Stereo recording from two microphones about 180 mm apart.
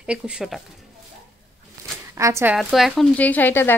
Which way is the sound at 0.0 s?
5° right (ahead or behind).